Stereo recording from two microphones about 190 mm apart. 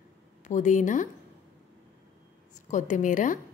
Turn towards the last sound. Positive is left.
turn(degrees=40)  # may be behind; listen again after turning